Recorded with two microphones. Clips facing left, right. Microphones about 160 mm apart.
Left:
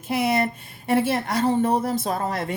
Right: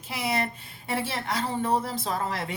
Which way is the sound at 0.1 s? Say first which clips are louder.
Left 7 dB; 55° left (ahead or behind).